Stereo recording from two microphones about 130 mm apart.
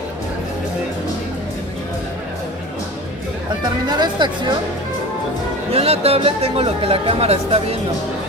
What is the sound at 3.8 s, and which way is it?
Speech, 35° right (ahead or behind).